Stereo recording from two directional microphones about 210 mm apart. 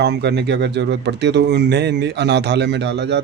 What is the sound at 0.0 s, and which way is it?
Speech, 50° right (ahead or behind).